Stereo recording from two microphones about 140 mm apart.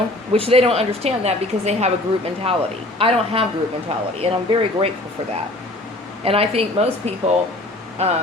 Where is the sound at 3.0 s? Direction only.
40° right (ahead or behind).